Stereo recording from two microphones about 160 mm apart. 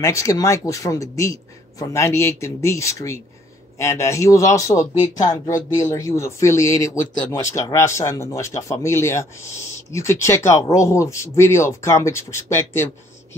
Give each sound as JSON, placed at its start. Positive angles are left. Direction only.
{"t": 0.0, "sound": "speech", "side_deg": 20}